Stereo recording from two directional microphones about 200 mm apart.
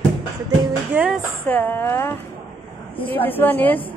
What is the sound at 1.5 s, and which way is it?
Speech, 10° left (ahead or behind).